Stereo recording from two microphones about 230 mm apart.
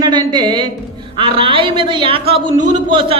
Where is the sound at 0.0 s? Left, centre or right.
Centre.